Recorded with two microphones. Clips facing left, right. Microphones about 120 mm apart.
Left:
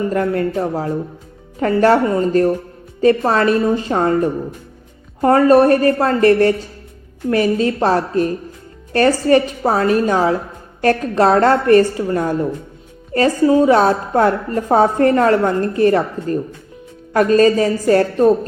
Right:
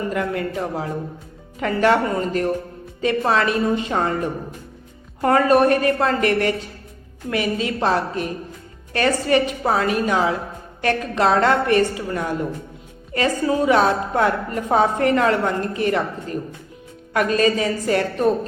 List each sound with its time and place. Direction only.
0.1 s a woman's voice: 35° left (ahead or behind)